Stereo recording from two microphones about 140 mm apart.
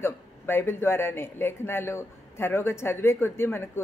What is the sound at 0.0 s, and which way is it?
Speech, 15° left (ahead or behind).